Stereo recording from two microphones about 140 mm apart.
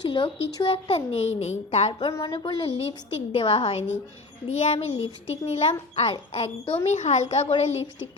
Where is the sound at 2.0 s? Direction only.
40° left (ahead or behind).